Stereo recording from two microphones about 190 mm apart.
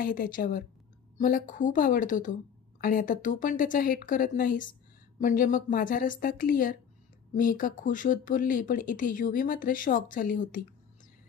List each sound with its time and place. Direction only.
0.0 s speech: 45° left (ahead or behind)